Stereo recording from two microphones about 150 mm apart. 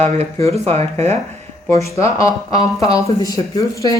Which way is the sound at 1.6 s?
20° left (ahead or behind).